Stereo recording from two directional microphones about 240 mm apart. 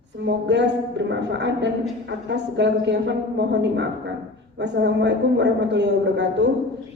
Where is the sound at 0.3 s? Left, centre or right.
Right.